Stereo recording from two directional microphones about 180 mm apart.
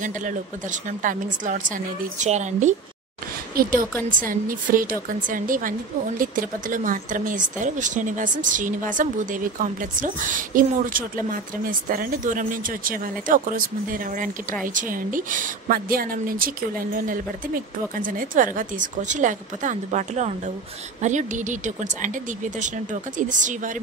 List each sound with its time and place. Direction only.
0.0 s a woman's voice: 45° right (ahead or behind)
3.6 s a woman's voice: 55° right (ahead or behind)